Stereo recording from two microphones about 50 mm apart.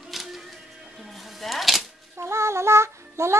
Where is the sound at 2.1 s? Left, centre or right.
Right.